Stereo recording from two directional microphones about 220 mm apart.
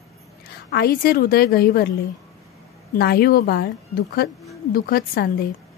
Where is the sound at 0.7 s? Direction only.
45° left (ahead or behind).